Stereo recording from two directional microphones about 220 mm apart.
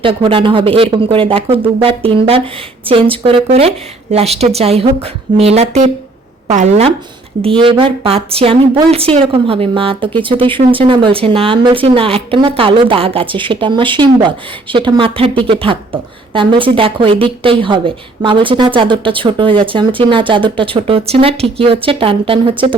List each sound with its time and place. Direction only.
0.0 s a woman's voice: 25° right (ahead or behind)